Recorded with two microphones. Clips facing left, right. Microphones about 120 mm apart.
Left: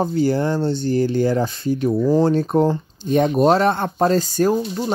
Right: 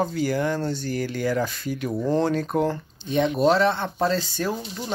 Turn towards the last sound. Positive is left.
turn(degrees=40)  # may be behind; listen again after turning